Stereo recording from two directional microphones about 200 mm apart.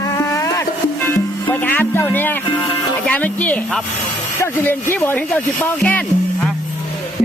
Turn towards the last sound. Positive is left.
turn(degrees=5)  # may be behind; listen again after turning